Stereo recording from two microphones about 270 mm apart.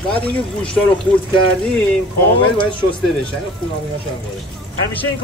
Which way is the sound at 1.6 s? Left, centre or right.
Centre.